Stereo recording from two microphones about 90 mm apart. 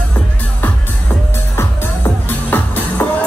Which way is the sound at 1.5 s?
25° left (ahead or behind).